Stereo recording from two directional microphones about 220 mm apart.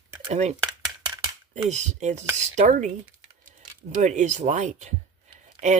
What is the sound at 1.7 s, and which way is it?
Speech, 30° right (ahead or behind).